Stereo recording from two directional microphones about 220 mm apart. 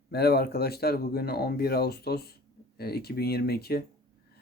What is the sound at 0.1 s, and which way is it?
Speech, 45° left (ahead or behind).